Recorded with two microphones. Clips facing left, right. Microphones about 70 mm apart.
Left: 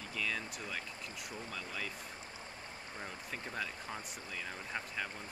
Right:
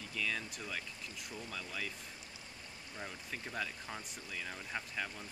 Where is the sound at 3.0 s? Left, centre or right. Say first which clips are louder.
Even; centre.